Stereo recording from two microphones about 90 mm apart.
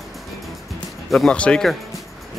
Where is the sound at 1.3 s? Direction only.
15° left (ahead or behind).